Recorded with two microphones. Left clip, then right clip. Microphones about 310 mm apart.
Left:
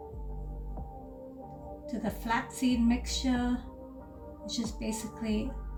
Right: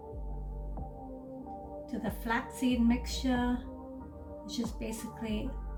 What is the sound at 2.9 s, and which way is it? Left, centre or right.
Music, centre.